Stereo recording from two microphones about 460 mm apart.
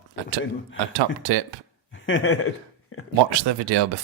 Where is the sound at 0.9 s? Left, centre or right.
Right.